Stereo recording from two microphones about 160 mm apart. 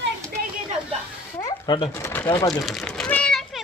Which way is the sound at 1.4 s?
25° left (ahead or behind).